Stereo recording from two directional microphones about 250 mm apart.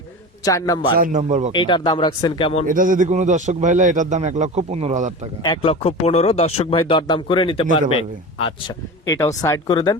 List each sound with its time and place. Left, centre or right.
0.4 s speech: centre
0.9 s a man's voice: right
1.5 s speech: centre
2.6 s a man's voice: right
5.4 s speech: left